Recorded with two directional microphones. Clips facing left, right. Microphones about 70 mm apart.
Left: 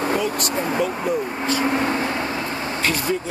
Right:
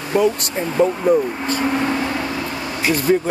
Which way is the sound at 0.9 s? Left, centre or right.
Centre.